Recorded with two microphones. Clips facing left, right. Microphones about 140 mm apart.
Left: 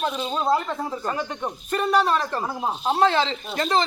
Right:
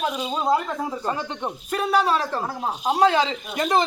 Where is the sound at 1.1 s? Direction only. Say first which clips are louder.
Left 1 dB; 25° right (ahead or behind).